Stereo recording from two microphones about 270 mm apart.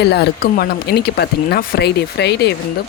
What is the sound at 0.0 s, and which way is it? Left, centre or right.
Speech, left.